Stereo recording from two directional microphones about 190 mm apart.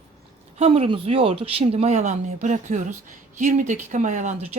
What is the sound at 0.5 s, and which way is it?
Speech, 35° right (ahead or behind).